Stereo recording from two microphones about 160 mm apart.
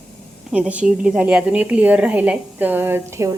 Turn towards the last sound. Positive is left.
turn(degrees=-15)  # may be behind; listen again after turning